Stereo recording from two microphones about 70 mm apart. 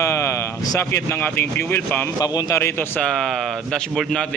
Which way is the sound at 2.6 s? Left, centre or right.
Left.